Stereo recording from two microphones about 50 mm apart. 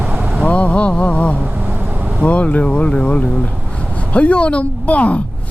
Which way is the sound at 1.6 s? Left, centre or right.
Right.